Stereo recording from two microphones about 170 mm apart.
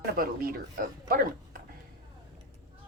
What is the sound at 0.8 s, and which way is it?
Speech, 55° right (ahead or behind).